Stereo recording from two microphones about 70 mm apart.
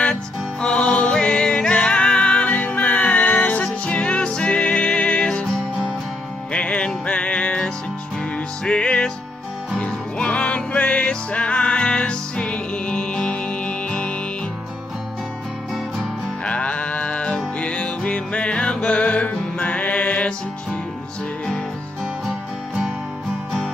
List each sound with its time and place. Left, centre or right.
0.1 s music: centre
16.4 s music: centre